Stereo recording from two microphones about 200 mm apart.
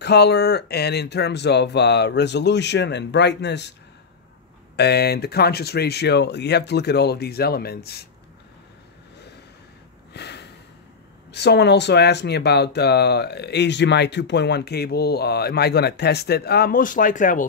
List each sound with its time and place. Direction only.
0.0 s speech: 55° left (ahead or behind)
4.7 s speech: 55° left (ahead or behind)
10.1 s a sound: 55° left (ahead or behind)
11.3 s speech: 55° left (ahead or behind); by 17.5 s 40° left (ahead or behind)